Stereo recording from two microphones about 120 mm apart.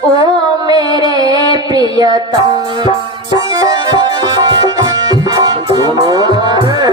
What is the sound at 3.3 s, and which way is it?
Music, 30° right (ahead or behind).